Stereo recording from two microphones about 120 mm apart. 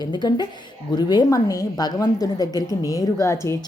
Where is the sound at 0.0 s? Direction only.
35° left (ahead or behind).